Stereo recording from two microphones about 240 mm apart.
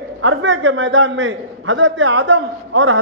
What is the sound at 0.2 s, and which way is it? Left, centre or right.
A man's voice, right.